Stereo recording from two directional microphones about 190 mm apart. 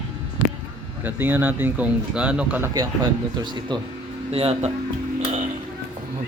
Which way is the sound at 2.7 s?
20° right (ahead or behind).